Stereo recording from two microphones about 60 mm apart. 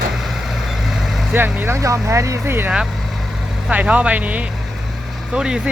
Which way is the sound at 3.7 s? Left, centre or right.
Right.